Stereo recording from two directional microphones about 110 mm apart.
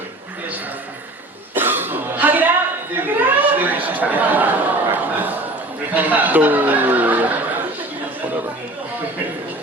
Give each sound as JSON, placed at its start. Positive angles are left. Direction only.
{"t": 1.5, "sound": "throat clearing", "side_deg": -20}
{"t": 3.0, "sound": "a sound", "side_deg": -15}
{"t": 5.9, "sound": "speech", "side_deg": -15}